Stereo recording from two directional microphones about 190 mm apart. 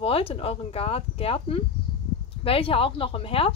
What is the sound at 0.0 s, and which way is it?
A woman's voice, 30° left (ahead or behind).